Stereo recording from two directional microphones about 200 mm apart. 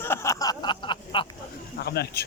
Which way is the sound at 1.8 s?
55° left (ahead or behind).